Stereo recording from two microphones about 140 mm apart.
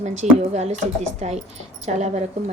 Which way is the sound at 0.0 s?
55° right (ahead or behind).